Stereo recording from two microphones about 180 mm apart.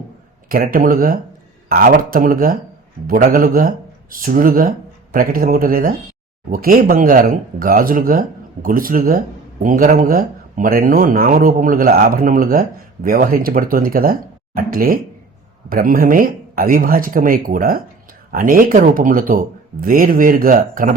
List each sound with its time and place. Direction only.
0.5 s speech: 50° right (ahead or behind)